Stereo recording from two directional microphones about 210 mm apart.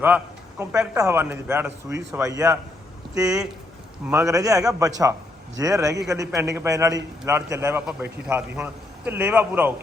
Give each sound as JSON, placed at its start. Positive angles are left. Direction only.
{"t": 0.6, "sound": "a man's voice", "side_deg": -15}